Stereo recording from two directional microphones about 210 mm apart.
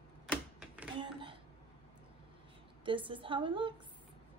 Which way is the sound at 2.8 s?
25° right (ahead or behind).